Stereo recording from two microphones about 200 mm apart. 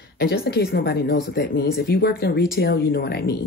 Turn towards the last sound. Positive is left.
turn(degrees=50)  # may be behind; listen again after turning